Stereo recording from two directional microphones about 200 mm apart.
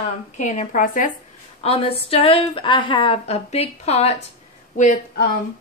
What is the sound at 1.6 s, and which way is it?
A woman's voice, 30° left (ahead or behind).